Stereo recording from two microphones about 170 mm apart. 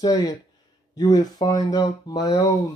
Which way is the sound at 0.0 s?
20° left (ahead or behind).